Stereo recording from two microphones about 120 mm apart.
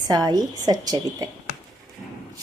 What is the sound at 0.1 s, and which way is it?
A woman's voice, 35° right (ahead or behind).